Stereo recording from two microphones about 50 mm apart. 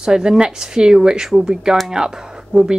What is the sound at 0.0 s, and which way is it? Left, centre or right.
Speech, centre.